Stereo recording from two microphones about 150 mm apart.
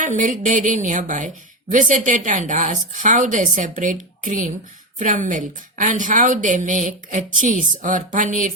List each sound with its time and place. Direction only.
0.0 s a woman's voice: 60° right (ahead or behind)